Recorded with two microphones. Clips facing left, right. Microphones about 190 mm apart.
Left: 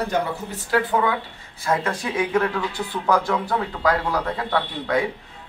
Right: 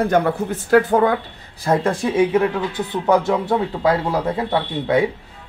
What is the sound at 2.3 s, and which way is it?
Speech, 20° right (ahead or behind).